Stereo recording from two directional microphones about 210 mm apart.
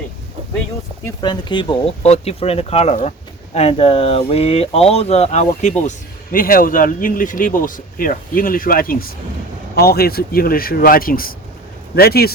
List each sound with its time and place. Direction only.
1.0 s a man's voice: 20° left (ahead or behind); by 12.3 s 45° left (ahead or behind)